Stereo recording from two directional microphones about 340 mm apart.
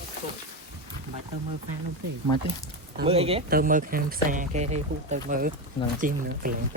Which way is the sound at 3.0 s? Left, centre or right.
Centre.